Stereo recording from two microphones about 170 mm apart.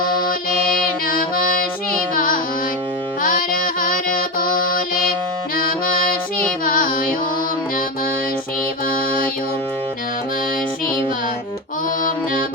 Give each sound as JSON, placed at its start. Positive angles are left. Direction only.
{"t": 1.0, "sound": "music", "side_deg": 55}
{"t": 8.9, "sound": "music", "side_deg": 60}
{"t": 12.0, "sound": "music", "side_deg": 55}